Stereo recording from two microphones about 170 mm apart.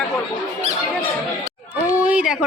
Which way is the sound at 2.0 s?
5° right (ahead or behind).